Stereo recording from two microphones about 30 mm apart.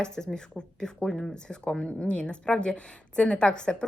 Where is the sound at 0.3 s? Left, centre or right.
Centre.